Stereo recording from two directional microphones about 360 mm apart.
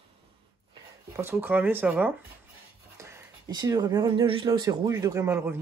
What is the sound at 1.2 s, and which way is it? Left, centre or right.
Speech, centre.